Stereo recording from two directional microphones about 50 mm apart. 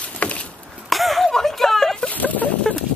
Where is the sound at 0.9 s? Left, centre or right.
Centre.